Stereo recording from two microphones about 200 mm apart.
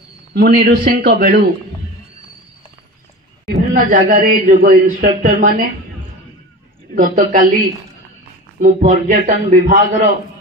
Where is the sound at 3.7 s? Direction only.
45° right (ahead or behind).